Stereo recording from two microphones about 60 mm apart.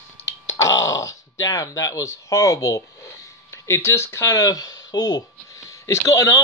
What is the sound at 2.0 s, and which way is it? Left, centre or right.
Speech, left.